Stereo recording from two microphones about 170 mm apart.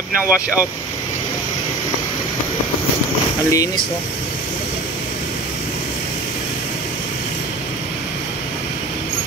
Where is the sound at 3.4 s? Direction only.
20° left (ahead or behind).